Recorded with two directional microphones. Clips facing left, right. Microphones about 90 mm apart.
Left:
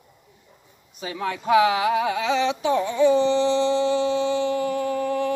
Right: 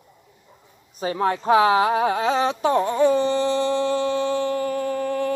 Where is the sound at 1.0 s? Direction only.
40° right (ahead or behind).